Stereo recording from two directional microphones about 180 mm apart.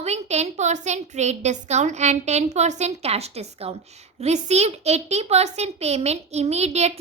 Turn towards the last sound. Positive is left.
turn(degrees=-35)  # may be behind; listen again after turning